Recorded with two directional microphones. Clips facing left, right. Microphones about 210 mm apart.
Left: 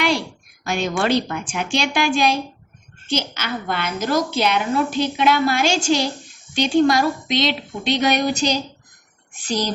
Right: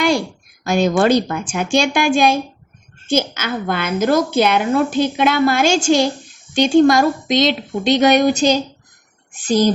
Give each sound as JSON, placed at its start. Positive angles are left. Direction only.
{"t": 0.6, "sound": "a woman's voice", "side_deg": -40}